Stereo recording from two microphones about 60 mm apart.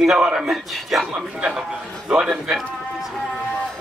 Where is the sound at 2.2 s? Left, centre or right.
Centre.